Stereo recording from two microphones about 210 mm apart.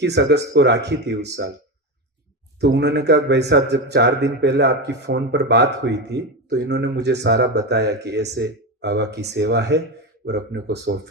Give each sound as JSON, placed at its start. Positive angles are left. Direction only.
{"t": 0.0, "sound": "speech", "side_deg": -55}
{"t": 2.6, "sound": "speech", "side_deg": -55}